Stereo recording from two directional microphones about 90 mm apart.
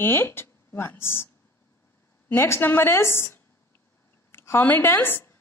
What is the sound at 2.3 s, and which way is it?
A woman's voice, 25° left (ahead or behind).